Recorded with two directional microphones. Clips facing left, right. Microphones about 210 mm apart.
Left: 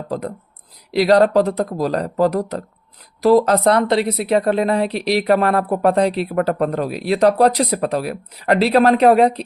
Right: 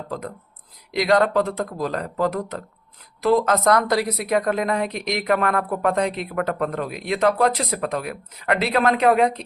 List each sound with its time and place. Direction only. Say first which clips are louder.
0.1 s a woman's voice: left 6 dB; 35° left (ahead or behind)